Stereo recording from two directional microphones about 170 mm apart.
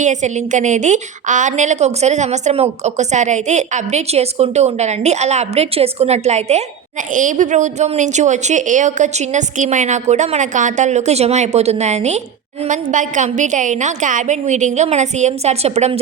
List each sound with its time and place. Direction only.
0.0 s a woman's voice: 45° right (ahead or behind)